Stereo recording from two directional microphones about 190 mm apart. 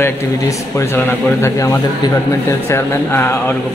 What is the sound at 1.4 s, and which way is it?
A man's voice, 15° left (ahead or behind).